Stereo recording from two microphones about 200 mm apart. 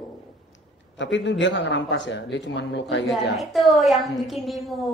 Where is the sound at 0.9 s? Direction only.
65° left (ahead or behind).